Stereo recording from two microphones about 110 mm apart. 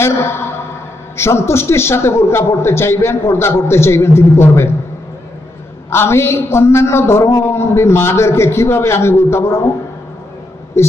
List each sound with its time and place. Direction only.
0.0 s a sound: 20° left (ahead or behind)
1.1 s a man's voice: 25° left (ahead or behind)
5.9 s a man's voice: 20° left (ahead or behind)
10.8 s a man's voice: 25° left (ahead or behind)